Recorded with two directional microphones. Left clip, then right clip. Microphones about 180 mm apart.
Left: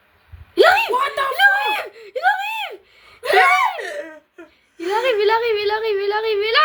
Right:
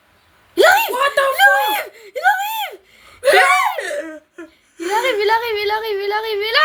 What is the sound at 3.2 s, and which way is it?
Speech, 60° right (ahead or behind).